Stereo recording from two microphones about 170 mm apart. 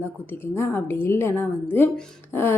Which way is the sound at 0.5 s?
15° left (ahead or behind).